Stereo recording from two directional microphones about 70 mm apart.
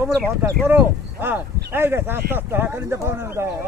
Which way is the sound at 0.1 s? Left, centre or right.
Right.